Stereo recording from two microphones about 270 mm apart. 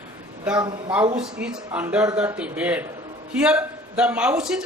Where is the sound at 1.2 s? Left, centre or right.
Centre.